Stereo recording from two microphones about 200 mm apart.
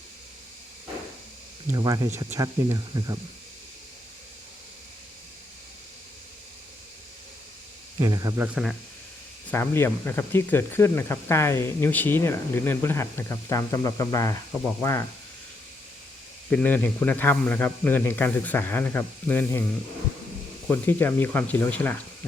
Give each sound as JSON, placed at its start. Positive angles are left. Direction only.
{"t": 1.7, "sound": "speech", "side_deg": -20}
{"t": 7.9, "sound": "speech", "side_deg": -20}
{"t": 9.5, "sound": "speech", "side_deg": 10}
{"t": 16.5, "sound": "speech", "side_deg": 5}
{"t": 20.7, "sound": "speech", "side_deg": 10}